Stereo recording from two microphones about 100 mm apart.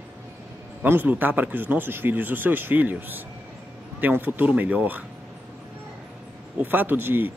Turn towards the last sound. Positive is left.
turn(degrees=-20)  # may be behind; listen again after turning